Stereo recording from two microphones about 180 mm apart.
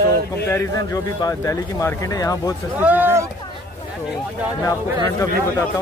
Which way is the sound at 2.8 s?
10° right (ahead or behind).